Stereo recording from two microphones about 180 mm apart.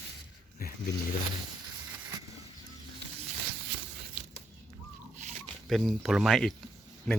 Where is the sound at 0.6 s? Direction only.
55° left (ahead or behind).